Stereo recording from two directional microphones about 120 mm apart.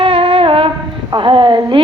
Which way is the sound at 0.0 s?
50° right (ahead or behind).